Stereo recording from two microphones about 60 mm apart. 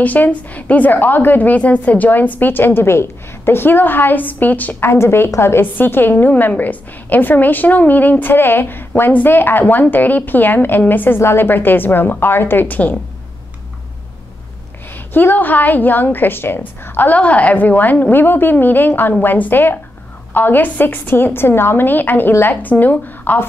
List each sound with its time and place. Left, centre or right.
0.0 s a woman's voice: left
4.7 s a woman's voice: left
15.1 s a woman's voice: left
17.2 s a woman's voice: left